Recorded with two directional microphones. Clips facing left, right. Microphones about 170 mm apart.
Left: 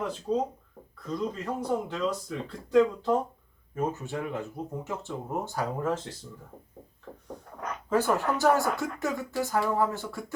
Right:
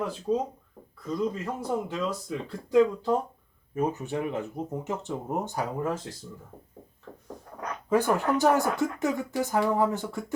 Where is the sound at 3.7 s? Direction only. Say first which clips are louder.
Right 3 dB; 15° right (ahead or behind).